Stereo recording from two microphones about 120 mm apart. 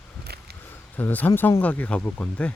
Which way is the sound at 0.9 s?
15° left (ahead or behind).